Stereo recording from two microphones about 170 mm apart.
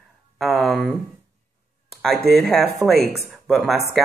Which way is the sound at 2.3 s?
Centre (ahead or behind).